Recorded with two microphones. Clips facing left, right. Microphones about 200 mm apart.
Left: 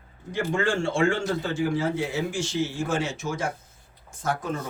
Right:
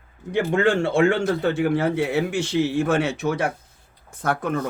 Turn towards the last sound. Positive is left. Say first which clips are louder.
# right 5 dB
turn(degrees=-60)  # may be behind; listen again after turning